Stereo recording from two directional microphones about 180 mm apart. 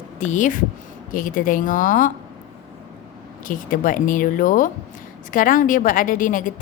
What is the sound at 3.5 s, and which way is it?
A woman's voice, 50° left (ahead or behind).